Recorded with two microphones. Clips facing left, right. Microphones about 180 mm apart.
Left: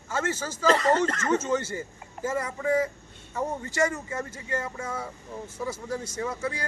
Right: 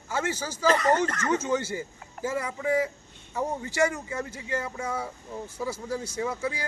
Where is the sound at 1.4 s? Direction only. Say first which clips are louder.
Even; 10° right (ahead or behind).